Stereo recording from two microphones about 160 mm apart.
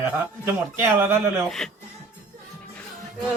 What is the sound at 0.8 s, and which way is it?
Speech, 15° right (ahead or behind).